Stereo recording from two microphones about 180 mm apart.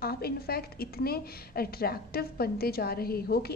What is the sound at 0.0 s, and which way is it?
A woman's voice, 60° left (ahead or behind).